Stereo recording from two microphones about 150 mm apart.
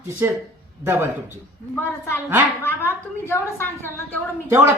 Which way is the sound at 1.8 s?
15° left (ahead or behind).